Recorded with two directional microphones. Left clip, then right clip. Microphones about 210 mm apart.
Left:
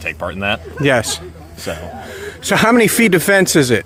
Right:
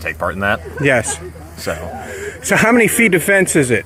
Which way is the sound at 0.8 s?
25° left (ahead or behind).